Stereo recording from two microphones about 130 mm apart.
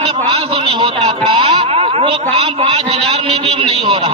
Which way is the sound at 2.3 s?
45° right (ahead or behind).